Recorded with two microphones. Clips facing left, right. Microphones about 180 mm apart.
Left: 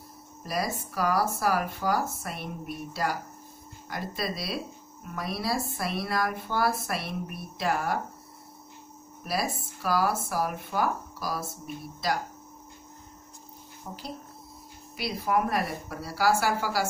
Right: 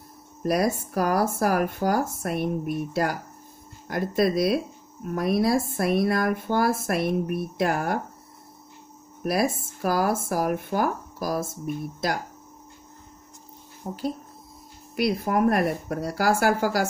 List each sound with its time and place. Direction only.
0.4 s speech: 55° right (ahead or behind)
9.2 s speech: 55° right (ahead or behind)
13.9 s speech: 30° right (ahead or behind)
15.0 s speech: 50° right (ahead or behind)